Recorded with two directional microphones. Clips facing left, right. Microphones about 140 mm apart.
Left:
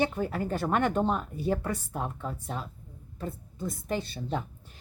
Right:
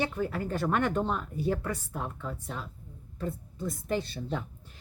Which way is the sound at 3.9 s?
20° left (ahead or behind).